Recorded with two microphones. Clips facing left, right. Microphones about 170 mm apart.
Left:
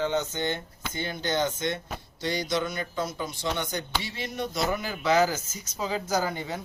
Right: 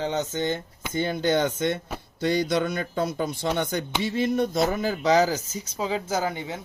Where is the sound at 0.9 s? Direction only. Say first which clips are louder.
Right 6 dB; 55° right (ahead or behind).